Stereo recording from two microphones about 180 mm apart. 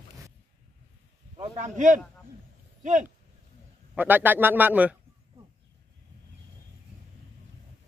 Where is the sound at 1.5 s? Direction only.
40° right (ahead or behind).